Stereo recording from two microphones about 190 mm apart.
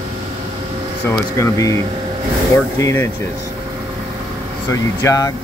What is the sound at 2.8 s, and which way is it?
Speech, 15° left (ahead or behind).